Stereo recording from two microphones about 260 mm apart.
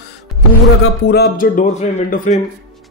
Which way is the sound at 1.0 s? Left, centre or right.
Left.